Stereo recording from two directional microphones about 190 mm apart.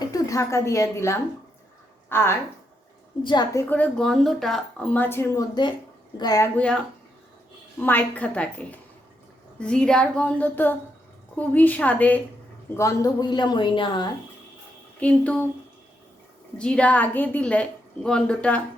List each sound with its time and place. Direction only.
0.0 s a woman's voice: 15° left (ahead or behind)
6.6 s a woman's voice: 5° left (ahead or behind); by 14.1 s 25° left (ahead or behind)
15.0 s a woman's voice: 5° left (ahead or behind)
16.6 s a woman's voice: 5° left (ahead or behind)